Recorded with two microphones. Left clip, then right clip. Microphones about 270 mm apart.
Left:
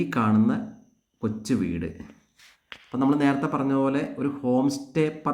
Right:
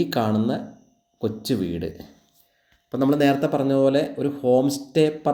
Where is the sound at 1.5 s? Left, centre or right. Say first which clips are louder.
Even; centre.